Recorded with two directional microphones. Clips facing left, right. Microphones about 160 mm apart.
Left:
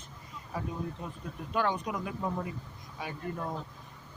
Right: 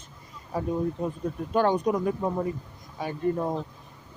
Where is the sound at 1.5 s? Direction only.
40° right (ahead or behind).